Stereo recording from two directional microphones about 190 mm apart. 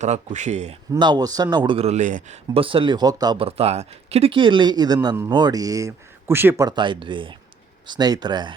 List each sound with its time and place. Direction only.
0.0 s speech: 40° right (ahead or behind)
0.9 s speech: 25° right (ahead or behind)